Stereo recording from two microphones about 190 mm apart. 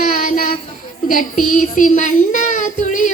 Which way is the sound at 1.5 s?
40° left (ahead or behind).